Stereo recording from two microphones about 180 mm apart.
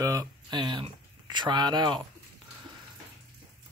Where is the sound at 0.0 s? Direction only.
20° right (ahead or behind).